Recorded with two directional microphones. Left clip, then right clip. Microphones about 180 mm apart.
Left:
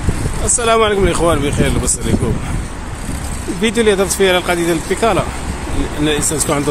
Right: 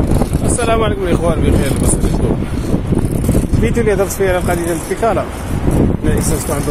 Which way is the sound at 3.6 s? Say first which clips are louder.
Left 2 dB; 25° left (ahead or behind).